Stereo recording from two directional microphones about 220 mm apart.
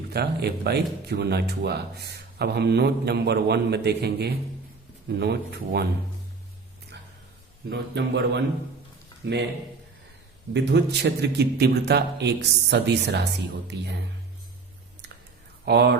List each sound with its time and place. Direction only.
0.1 s speech: 45° right (ahead or behind)
6.9 s a sound: 50° right (ahead or behind)
7.7 s speech: 50° right (ahead or behind)
10.5 s speech: 50° right (ahead or behind)
15.6 s speech: 50° right (ahead or behind)